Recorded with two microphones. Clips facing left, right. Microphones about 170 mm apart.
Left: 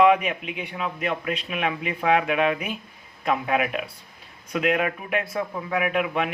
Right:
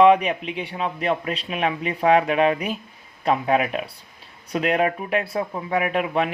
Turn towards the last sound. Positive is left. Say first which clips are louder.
# right 2 dB
turn(degrees=-35)  # may be behind; listen again after turning